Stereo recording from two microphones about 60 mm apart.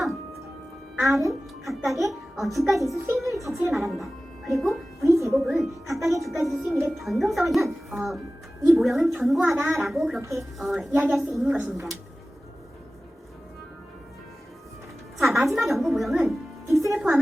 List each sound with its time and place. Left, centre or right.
0.9 s a child's voice: centre
3.9 s music: centre
5.3 s speech: centre
10.2 s a woman's voice: right
10.6 s speech: centre
11.4 s speech: right
15.2 s music: centre
16.9 s a sound: centre